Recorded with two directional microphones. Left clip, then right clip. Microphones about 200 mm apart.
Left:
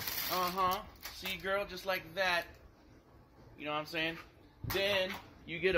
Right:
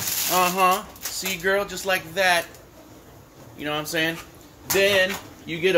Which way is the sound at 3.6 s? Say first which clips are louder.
Right 11 dB; 25° right (ahead or behind).